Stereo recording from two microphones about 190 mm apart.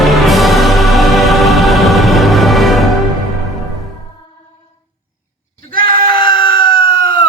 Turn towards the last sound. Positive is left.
turn(degrees=25)  # may be behind; listen again after turning